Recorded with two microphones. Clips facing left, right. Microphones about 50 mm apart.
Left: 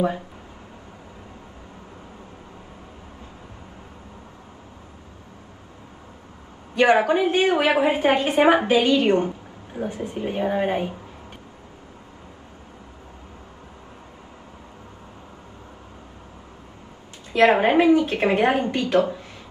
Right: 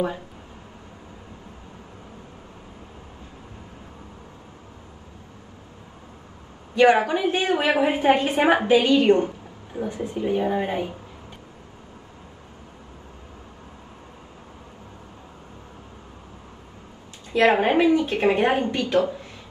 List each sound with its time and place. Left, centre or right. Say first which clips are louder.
6.8 s a woman's voice: even; left
17.3 s a woman's voice: left 2 dB; left